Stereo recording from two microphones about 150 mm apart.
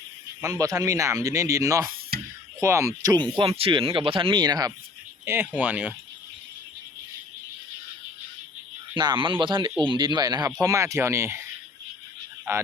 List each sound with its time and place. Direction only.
0.4 s speech: 25° right (ahead or behind)
5.2 s speech: 15° right (ahead or behind)
9.0 s speech: 30° right (ahead or behind)
12.5 s speech: 15° right (ahead or behind)